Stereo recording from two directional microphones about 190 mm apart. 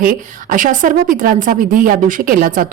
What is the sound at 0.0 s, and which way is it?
Speech, 45° right (ahead or behind).